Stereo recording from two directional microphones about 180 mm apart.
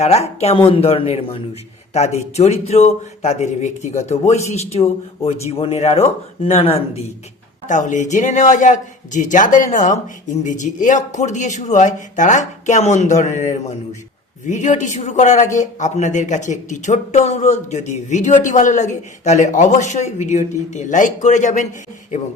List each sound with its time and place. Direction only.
0.0 s speech: 35° left (ahead or behind)
7.7 s a man's voice: 45° left (ahead or behind)